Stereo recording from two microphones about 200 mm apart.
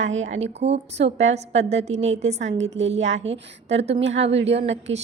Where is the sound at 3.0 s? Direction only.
65° right (ahead or behind).